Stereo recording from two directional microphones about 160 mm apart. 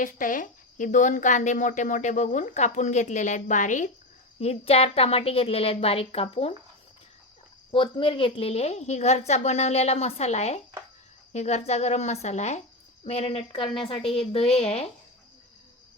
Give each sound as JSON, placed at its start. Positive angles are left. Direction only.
{"t": 0.0, "sound": "a woman's voice", "side_deg": 55}
{"t": 4.4, "sound": "a woman's voice", "side_deg": 40}
{"t": 7.7, "sound": "a woman's voice", "side_deg": 30}